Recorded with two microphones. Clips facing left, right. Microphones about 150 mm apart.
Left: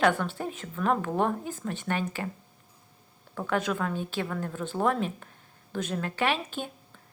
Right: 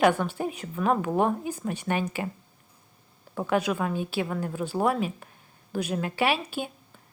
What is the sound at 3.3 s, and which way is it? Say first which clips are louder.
A woman's voice: right 3 dB; 15° right (ahead or behind).